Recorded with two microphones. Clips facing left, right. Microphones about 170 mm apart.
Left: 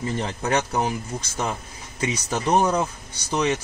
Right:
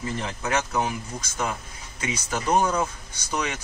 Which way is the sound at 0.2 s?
35° left (ahead or behind).